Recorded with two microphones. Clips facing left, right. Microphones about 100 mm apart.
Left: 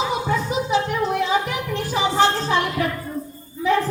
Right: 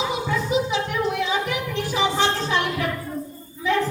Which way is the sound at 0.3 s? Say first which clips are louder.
Left 1 dB; 40° left (ahead or behind).